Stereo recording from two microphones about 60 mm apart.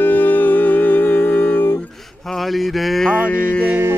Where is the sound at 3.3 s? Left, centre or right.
Left.